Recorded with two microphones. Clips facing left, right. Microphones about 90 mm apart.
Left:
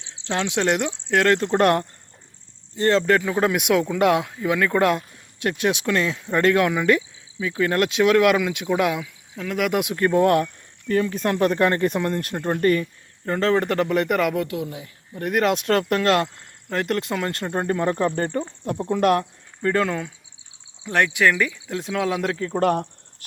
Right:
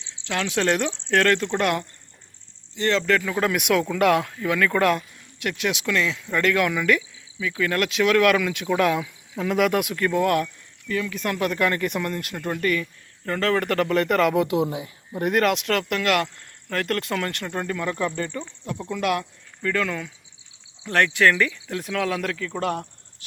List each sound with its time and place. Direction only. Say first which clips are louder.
0.3 s speech: left 1 dB; 20° left (ahead or behind)
1.3 s speech: left 4 dB; 35° left (ahead or behind); by 9.0 s 15° left (ahead or behind)
9.4 s speech: right 3 dB; centre (ahead or behind)
9.7 s speech: left 3 dB; 25° left (ahead or behind)
13.2 s speech: left 2 dB; 25° left (ahead or behind)
14.4 s speech: right 5 dB; 20° right (ahead or behind)
15.8 s speech: left 3 dB; 35° left (ahead or behind)
19.6 s speech: left 4 dB; 30° left (ahead or behind)
20.8 s speech: even; 15° left (ahead or behind); by 22.6 s 30° left (ahead or behind)